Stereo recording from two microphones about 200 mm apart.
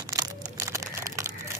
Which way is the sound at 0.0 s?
15° right (ahead or behind).